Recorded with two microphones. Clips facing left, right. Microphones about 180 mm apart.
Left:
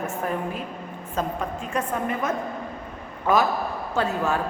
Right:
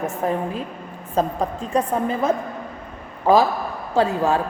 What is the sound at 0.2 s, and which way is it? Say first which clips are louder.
A woman's voice: right 6 dB; 30° right (ahead or behind).